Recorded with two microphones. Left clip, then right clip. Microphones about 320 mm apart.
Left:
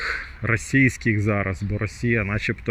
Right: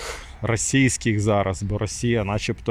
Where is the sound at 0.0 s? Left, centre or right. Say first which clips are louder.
Left 4 dB; centre.